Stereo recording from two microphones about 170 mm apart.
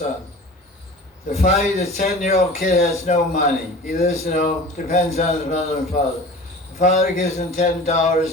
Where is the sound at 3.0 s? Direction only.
40° left (ahead or behind).